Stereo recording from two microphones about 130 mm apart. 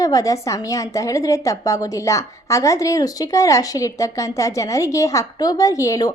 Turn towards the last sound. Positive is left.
turn(degrees=25)  # may be behind; listen again after turning